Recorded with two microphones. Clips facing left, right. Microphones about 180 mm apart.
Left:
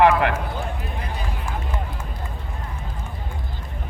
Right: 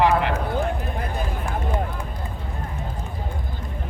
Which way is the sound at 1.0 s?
50° right (ahead or behind).